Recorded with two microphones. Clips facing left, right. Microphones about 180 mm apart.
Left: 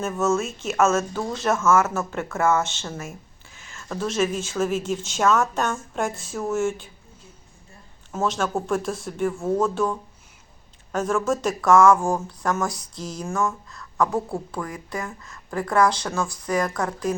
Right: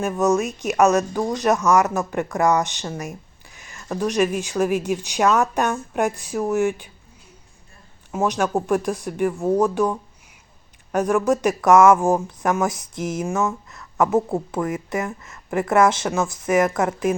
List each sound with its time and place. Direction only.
0.0 s speech: 15° right (ahead or behind)
8.1 s speech: 15° right (ahead or behind)